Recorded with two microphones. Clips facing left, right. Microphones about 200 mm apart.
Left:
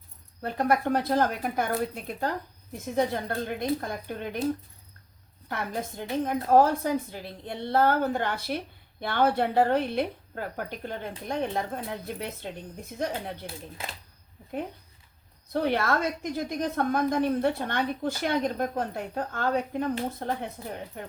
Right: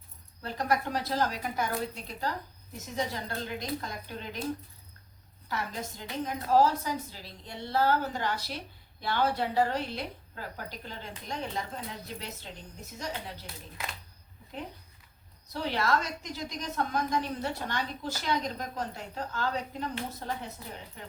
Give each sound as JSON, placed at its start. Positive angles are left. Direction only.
{"t": 0.4, "sound": "a woman's voice", "side_deg": 55}
{"t": 5.5, "sound": "a woman's voice", "side_deg": 55}
{"t": 15.5, "sound": "a woman's voice", "side_deg": 55}